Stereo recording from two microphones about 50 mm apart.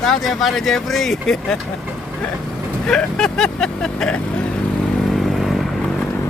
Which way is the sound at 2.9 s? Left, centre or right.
Centre.